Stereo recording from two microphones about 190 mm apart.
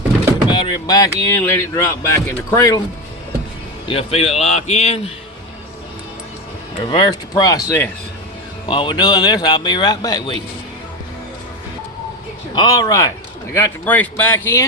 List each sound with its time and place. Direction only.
0.4 s speech: 25° left (ahead or behind)
3.8 s a man's voice: 30° left (ahead or behind)
6.9 s speech: 20° left (ahead or behind)
12.5 s speech: 20° left (ahead or behind)